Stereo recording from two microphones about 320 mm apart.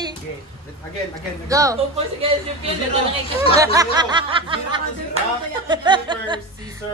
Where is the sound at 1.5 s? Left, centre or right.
Centre.